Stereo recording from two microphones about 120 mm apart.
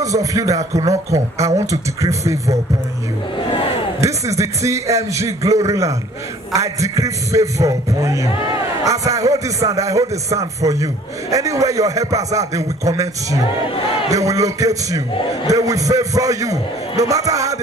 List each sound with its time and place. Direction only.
0.0 s a man's voice: 30° right (ahead or behind)
3.3 s a sound: 45° left (ahead or behind)
4.0 s a man's voice: 25° right (ahead or behind)